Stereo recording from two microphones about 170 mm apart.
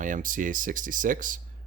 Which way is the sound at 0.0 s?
50° right (ahead or behind).